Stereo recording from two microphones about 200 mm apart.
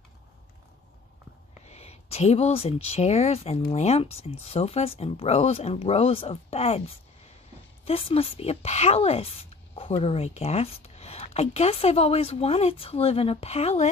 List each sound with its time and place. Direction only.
1.7 s speech: 30° left (ahead or behind)
7.8 s speech: 30° left (ahead or behind)